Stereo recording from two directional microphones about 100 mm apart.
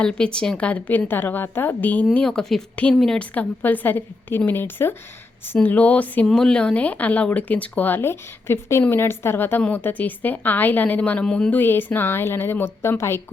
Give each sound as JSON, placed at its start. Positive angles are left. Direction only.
{"t": 0.0, "sound": "speech", "side_deg": 10}
{"t": 2.1, "sound": "speech", "side_deg": 5}
{"t": 3.3, "sound": "speech", "side_deg": 20}
{"t": 11.6, "sound": "speech", "side_deg": 20}